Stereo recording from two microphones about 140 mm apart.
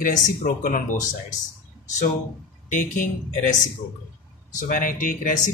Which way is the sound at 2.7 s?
65° left (ahead or behind).